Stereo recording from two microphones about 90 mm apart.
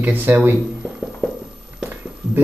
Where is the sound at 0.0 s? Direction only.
25° right (ahead or behind).